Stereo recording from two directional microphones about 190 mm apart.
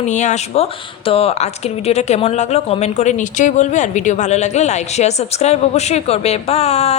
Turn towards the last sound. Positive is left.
turn(degrees=35)  # may be behind; listen again after turning